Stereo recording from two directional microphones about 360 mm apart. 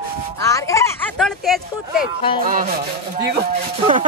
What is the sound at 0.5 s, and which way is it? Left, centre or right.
A man's voice, centre.